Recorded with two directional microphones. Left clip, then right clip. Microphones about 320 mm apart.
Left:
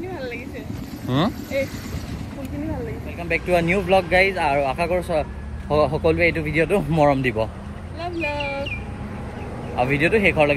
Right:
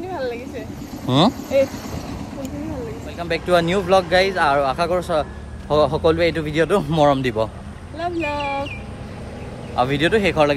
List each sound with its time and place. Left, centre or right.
1.0 s speech: centre
3.2 s speech: centre
8.0 s a sound: right
9.8 s speech: centre